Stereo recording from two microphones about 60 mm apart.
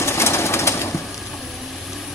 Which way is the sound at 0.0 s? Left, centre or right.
Left.